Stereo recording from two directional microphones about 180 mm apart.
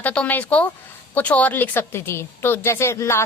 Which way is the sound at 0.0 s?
5° left (ahead or behind).